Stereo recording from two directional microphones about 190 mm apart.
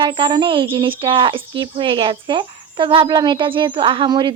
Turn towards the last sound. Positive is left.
turn(degrees=-25)  # may be behind; listen again after turning